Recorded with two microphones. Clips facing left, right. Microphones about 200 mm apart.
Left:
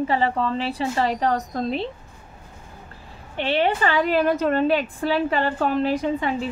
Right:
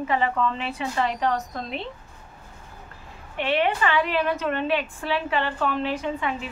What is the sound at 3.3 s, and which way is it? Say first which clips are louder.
A woman's voice: left 2 dB; 30° left (ahead or behind).